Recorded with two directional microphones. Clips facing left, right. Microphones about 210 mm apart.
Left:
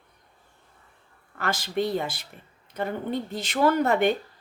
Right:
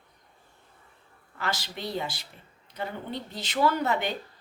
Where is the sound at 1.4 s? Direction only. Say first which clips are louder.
Left 7 dB; 50° left (ahead or behind).